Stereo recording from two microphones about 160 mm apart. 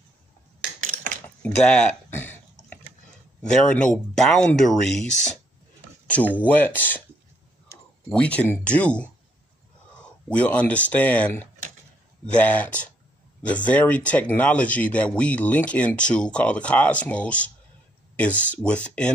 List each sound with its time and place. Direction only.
0.7 s a sound: 55° right (ahead or behind)
1.2 s chewing: 10° left (ahead or behind)
3.4 s speech: 5° left (ahead or behind)
6.0 s speech: 10° left (ahead or behind)
8.1 s speech: 10° left (ahead or behind)
18.5 s speech: 5° left (ahead or behind)